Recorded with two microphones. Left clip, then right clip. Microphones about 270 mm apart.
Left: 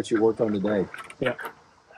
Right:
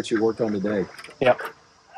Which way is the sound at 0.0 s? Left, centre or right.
Centre.